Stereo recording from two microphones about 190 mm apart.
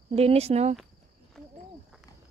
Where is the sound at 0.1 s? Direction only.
35° right (ahead or behind).